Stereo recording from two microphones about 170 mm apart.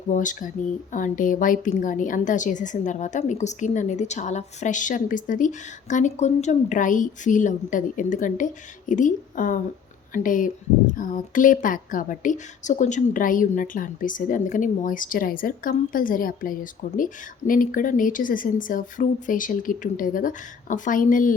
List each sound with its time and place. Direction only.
0.1 s speech: 50° left (ahead or behind)